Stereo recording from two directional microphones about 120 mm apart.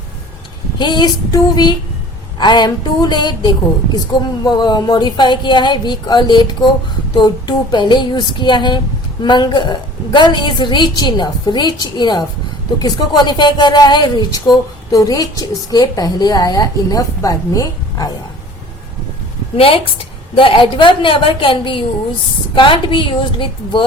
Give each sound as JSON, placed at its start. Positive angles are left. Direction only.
{"t": 0.8, "sound": "a woman's voice", "side_deg": 40}
{"t": 19.5, "sound": "a woman's voice", "side_deg": 50}